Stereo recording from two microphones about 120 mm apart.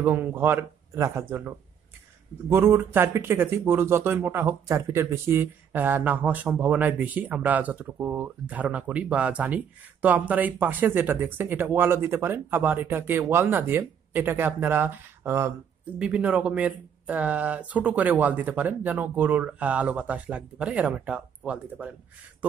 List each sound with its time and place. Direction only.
0.0 s speech: 15° right (ahead or behind)
2.5 s speech: 20° right (ahead or behind)
16.0 s speech: 10° right (ahead or behind)